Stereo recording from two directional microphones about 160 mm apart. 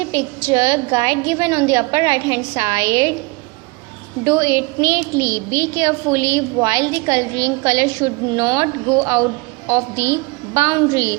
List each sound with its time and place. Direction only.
0.1 s a woman's voice: 15° right (ahead or behind)
4.2 s a woman's voice: 15° right (ahead or behind)